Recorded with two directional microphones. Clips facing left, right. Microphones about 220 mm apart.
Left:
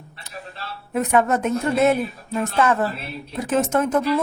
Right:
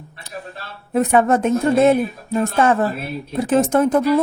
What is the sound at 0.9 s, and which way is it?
A woman's voice, 30° right (ahead or behind).